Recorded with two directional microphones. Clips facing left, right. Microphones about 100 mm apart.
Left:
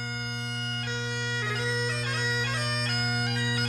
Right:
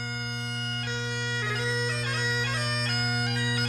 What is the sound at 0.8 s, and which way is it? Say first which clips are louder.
Bagpipes: even; 25° left (ahead or behind).